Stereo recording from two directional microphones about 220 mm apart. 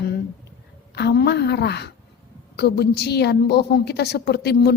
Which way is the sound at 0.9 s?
50° left (ahead or behind).